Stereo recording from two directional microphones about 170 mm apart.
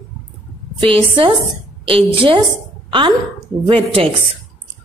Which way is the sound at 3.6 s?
30° right (ahead or behind).